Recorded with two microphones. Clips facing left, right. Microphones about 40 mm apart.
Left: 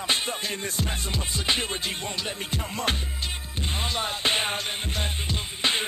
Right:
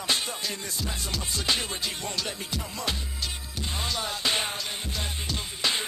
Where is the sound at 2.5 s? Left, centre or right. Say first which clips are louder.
Left 5 dB; left.